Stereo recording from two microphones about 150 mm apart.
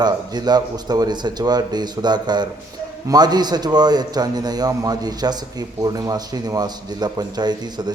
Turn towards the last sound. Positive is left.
turn(degrees=-30)  # may be behind; listen again after turning